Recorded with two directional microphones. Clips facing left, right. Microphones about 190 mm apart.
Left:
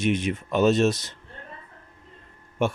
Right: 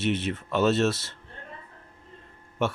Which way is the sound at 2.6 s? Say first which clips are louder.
Left 2 dB; 15° left (ahead or behind).